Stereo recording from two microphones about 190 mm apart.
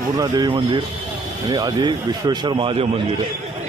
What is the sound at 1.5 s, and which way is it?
Speech, 20° right (ahead or behind).